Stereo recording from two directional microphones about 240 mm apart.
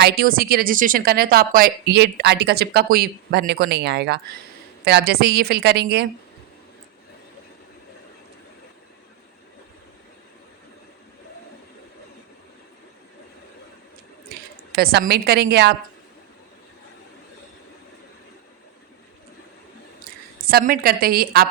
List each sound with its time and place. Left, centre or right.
0.0 s a woman's voice: right
14.7 s speech: right
20.4 s speech: right